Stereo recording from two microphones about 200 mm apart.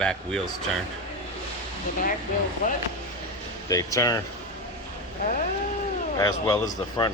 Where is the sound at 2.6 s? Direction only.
40° left (ahead or behind).